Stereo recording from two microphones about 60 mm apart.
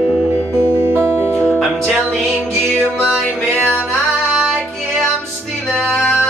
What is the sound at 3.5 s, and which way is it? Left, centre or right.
Music, centre.